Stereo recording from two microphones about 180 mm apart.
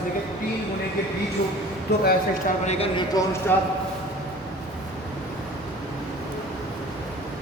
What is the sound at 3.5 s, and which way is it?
Speech, 10° left (ahead or behind).